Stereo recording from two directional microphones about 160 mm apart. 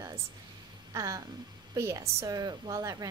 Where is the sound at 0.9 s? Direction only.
20° right (ahead or behind).